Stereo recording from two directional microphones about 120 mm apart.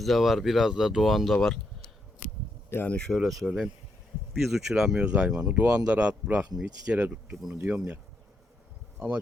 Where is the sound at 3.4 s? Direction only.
5° right (ahead or behind).